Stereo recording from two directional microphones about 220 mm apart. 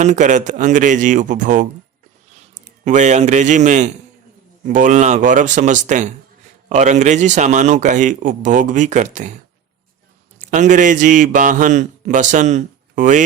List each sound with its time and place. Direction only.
0.0 s a man's voice: 35° right (ahead or behind)
2.8 s a man's voice: 35° right (ahead or behind)
10.4 s a man's voice: 35° right (ahead or behind)